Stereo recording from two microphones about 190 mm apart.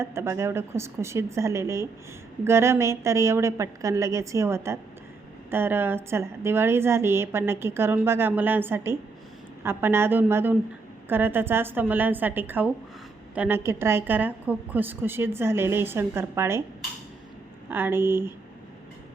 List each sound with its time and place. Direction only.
0.0 s a woman's voice: 15° right (ahead or behind)
17.7 s a woman's voice: 10° right (ahead or behind)